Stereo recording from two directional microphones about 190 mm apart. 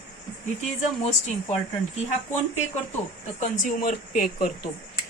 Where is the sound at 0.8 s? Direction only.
35° left (ahead or behind).